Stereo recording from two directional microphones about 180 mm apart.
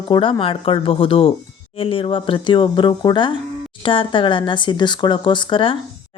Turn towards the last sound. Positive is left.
turn(degrees=25)  # may be behind; listen again after turning